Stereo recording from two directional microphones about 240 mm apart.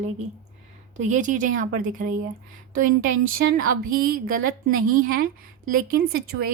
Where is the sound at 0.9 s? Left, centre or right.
Right.